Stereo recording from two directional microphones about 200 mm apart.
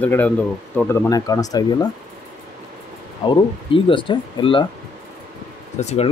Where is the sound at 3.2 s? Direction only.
25° left (ahead or behind).